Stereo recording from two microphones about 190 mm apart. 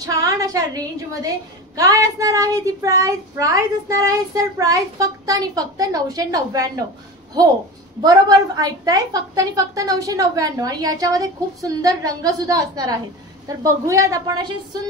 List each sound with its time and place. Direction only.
0.0 s a child's voice: 15° right (ahead or behind)
8.0 s a woman's voice: 20° right (ahead or behind)